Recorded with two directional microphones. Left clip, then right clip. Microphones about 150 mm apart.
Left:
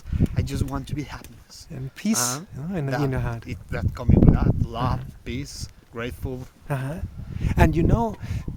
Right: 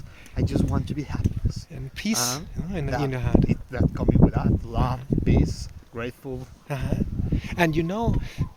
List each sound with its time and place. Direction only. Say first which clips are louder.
0.3 s speech: right 3 dB; 20° left (ahead or behind)
1.7 s speech: left 1 dB; 55° left (ahead or behind)
3.4 s speech: right 6 dB; 15° left (ahead or behind)
6.7 s speech: right 1 dB; 50° left (ahead or behind)